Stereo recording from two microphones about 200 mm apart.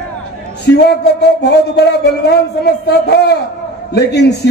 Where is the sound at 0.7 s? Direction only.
55° left (ahead or behind).